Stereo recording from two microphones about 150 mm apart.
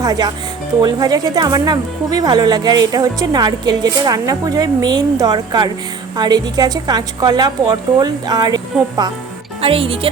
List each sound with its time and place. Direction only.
0.0 s speech: 25° right (ahead or behind)
9.6 s speech: 40° right (ahead or behind)